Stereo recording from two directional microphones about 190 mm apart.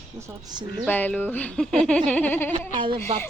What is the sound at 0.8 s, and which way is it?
Speech, 10° left (ahead or behind).